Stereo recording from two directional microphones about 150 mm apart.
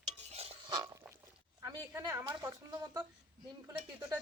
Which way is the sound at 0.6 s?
25° right (ahead or behind).